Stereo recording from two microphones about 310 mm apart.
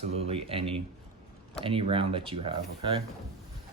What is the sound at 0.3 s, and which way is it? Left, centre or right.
Speech, centre.